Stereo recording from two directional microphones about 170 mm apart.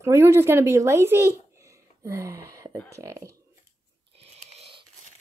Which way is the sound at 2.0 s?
20° right (ahead or behind).